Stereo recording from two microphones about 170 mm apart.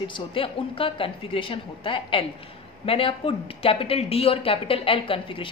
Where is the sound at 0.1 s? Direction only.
30° left (ahead or behind).